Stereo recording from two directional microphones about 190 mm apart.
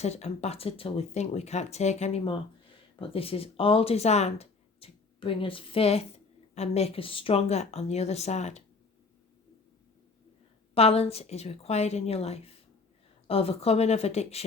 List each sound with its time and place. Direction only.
0.0 s speech: 35° left (ahead or behind)
10.8 s speech: 30° left (ahead or behind)